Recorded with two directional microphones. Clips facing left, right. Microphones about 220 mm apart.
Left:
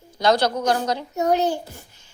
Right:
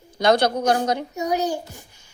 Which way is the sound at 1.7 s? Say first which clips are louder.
Even; 15° right (ahead or behind).